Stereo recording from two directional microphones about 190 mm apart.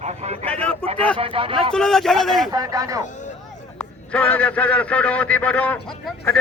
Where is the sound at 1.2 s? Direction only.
30° right (ahead or behind).